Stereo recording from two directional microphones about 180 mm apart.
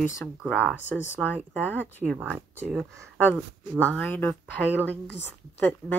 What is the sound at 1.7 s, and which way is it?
Speech, 10° left (ahead or behind).